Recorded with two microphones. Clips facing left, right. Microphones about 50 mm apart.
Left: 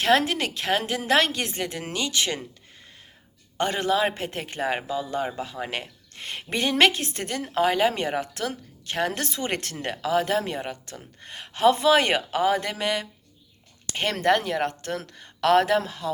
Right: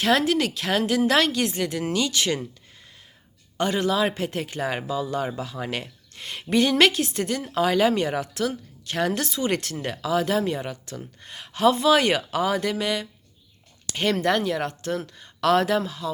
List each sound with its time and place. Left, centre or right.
0.0 s speech: left
3.6 s speech: left